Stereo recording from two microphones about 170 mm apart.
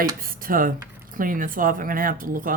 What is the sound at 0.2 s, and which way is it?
Computer keyboard, 55° right (ahead or behind).